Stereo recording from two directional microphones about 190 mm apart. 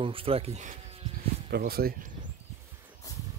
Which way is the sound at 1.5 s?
55° right (ahead or behind).